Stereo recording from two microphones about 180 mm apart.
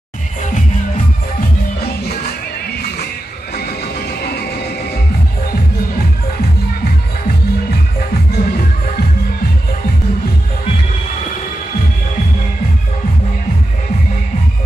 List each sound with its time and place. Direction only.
3.5 s music: 60° left (ahead or behind)
8.1 s music: 55° left (ahead or behind)